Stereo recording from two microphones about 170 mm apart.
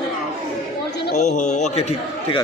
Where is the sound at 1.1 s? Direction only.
45° left (ahead or behind).